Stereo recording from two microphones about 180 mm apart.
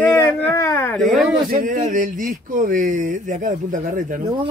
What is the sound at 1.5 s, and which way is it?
Speech, 45° right (ahead or behind).